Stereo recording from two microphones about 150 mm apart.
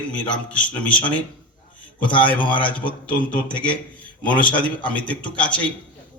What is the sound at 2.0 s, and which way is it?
A man's voice, 35° left (ahead or behind).